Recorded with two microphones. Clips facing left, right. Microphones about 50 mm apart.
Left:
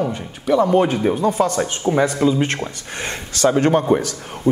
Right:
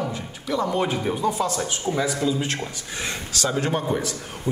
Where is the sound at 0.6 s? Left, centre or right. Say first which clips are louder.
Left 7 dB; left.